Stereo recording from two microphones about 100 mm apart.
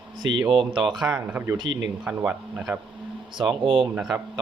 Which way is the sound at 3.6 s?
60° right (ahead or behind).